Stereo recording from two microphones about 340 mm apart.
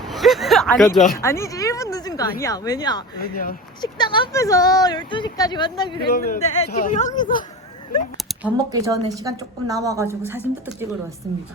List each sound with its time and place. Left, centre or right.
0.1 s speech: centre
6.1 s speech: left
8.2 s a sound: centre
8.7 s a woman's voice: centre